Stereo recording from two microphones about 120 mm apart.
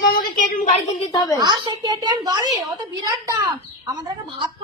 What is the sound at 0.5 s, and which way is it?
Speech, 90° left.